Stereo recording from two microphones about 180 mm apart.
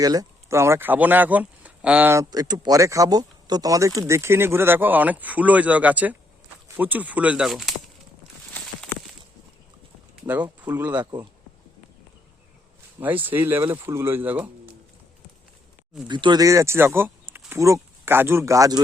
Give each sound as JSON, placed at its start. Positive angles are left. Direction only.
{"t": 0.0, "sound": "speech", "side_deg": -20}
{"t": 8.5, "sound": "a sound", "side_deg": 0}
{"t": 10.6, "sound": "speech", "side_deg": -10}
{"t": 11.0, "sound": "speech", "side_deg": -20}
{"t": 13.0, "sound": "speech", "side_deg": -10}
{"t": 16.0, "sound": "speech", "side_deg": -25}